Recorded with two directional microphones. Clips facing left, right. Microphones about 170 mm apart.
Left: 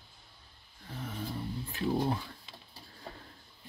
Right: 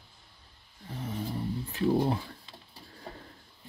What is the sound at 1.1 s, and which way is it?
Speech, 20° right (ahead or behind).